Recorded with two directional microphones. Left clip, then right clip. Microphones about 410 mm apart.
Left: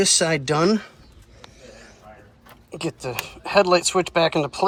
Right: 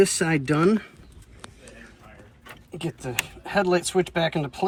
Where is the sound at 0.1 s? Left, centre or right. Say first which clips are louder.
Left 4 dB; centre.